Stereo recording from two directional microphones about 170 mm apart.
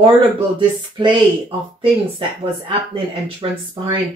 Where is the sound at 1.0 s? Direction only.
30° right (ahead or behind).